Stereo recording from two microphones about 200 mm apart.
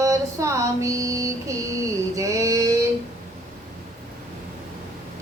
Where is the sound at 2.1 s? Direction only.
15° right (ahead or behind).